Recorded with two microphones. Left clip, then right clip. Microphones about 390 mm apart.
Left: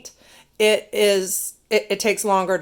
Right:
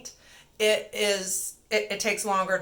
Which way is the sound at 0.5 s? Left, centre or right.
Left.